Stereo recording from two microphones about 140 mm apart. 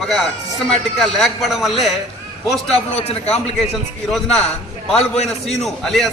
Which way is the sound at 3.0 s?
45° left (ahead or behind).